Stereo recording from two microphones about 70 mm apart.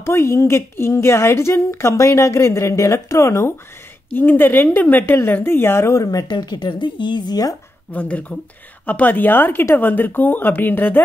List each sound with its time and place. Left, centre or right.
0.0 s a woman's voice: left
4.1 s speech: left
7.9 s speech: centre